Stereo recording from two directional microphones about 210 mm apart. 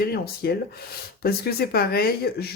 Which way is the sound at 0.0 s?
50° left (ahead or behind).